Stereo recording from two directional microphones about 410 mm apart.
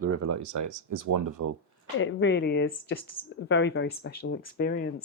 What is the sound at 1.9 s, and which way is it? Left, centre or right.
Speech, left.